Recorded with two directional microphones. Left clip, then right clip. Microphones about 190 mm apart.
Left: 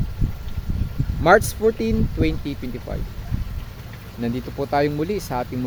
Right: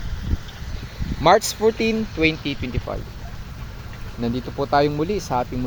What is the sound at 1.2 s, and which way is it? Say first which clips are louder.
Speech: even; 15° left (ahead or behind).